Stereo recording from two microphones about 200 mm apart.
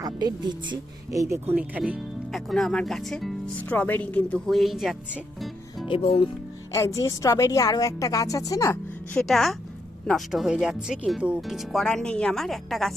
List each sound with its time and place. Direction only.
0.0 s speech: 20° right (ahead or behind); by 5.9 s centre (ahead or behind)
5.9 s speech: 30° left (ahead or behind)
6.7 s a woman's voice: 15° left (ahead or behind)